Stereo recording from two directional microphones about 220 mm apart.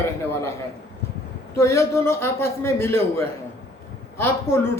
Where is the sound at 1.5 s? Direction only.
10° left (ahead or behind).